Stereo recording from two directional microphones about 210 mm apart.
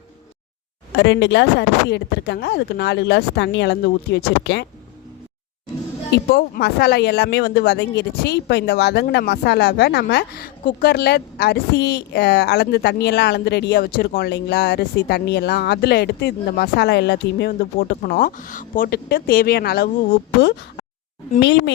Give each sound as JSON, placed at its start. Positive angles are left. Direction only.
{"t": 0.9, "sound": "speech", "side_deg": 55}
{"t": 6.1, "sound": "speech", "side_deg": 50}